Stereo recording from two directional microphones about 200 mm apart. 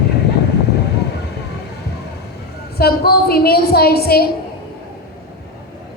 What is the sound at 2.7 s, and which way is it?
A woman's voice, 50° left (ahead or behind).